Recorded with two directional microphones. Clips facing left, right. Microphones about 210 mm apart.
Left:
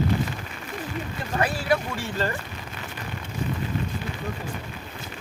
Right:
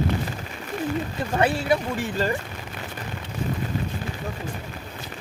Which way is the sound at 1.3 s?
25° right (ahead or behind).